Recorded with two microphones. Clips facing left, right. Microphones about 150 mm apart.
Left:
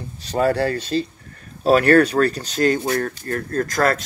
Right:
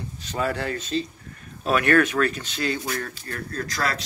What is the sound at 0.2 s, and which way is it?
Speech, 40° left (ahead or behind).